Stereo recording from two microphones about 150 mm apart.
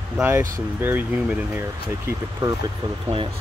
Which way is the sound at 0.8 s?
10° right (ahead or behind).